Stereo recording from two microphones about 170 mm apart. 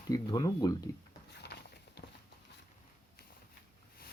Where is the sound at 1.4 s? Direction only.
80° left.